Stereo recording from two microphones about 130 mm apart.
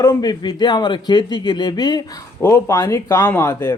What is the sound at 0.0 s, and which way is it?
A man's voice, 25° left (ahead or behind).